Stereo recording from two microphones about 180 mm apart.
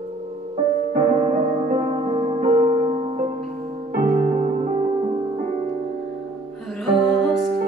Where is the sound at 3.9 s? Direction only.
50° right (ahead or behind).